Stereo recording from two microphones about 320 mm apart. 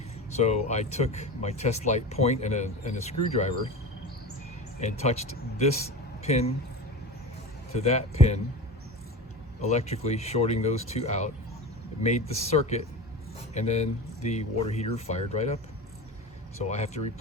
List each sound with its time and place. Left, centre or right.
0.3 s speech: left
4.8 s speech: left
7.8 s speech: centre
9.6 s speech: left
16.6 s speech: left